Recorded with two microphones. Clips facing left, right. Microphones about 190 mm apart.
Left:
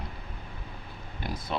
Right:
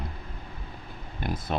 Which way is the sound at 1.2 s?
50° right (ahead or behind).